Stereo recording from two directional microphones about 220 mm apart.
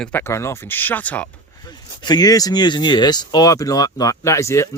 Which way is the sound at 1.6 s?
20° left (ahead or behind).